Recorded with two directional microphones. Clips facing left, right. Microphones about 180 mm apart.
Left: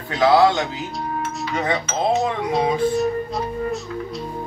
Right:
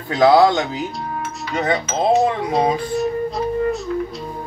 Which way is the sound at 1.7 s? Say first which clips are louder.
Right 4 dB; centre (ahead or behind).